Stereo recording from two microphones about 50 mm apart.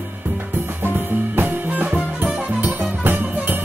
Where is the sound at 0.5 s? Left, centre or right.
Right.